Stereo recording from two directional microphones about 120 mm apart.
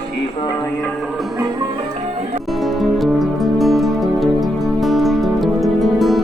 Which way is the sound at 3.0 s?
Centre (ahead or behind).